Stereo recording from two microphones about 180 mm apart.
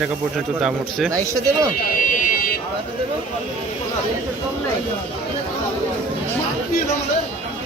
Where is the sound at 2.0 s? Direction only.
50° left (ahead or behind).